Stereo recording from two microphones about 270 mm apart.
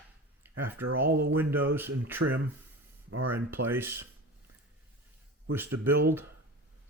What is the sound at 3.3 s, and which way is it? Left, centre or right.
Speech, centre.